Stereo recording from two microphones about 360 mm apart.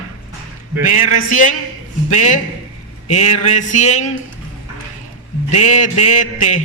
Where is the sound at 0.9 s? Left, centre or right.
Left.